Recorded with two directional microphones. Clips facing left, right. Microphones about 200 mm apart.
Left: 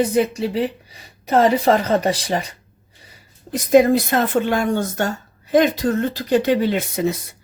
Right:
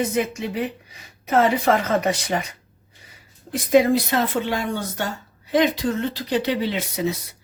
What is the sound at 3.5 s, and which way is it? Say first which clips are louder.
Speech: left 3 dB; 45° left (ahead or behind).